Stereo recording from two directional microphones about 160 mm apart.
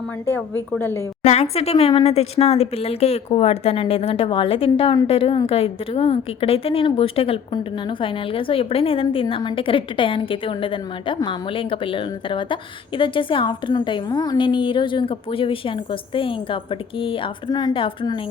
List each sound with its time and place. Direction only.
0.8 s a woman's voice: 15° left (ahead or behind)
1.2 s a woman's voice: 45° left (ahead or behind)